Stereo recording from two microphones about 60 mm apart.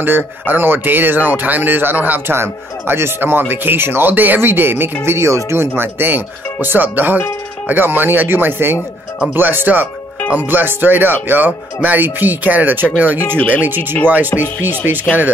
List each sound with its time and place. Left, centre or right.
0.0 s speech: right
5.8 s speech: right